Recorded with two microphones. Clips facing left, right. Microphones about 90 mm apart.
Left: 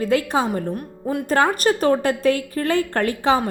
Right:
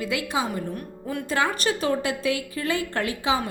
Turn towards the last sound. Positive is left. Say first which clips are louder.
# left 6 dB
turn(degrees=55)  # may be behind; listen again after turning